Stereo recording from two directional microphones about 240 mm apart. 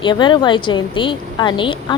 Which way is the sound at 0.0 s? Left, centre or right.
Centre.